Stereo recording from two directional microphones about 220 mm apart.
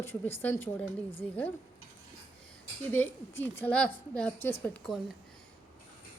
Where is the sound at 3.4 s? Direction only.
10° left (ahead or behind).